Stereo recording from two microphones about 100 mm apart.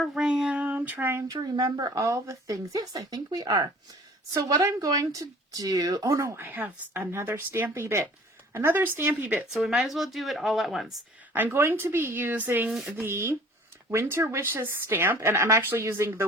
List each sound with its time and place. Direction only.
0.0 s a sound: 10° right (ahead or behind)
1.3 s speech: 40° right (ahead or behind)
6.3 s a woman's voice: 20° right (ahead or behind)
9.5 s speech: 5° right (ahead or behind)
11.3 s a woman's voice: 25° right (ahead or behind)